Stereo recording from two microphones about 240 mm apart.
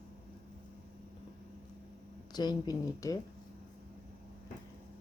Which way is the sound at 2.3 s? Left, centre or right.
Centre.